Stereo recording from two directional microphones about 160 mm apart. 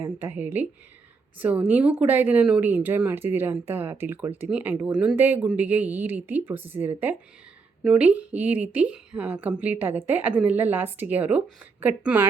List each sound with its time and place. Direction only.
0.0 s a woman's voice: 15° right (ahead or behind)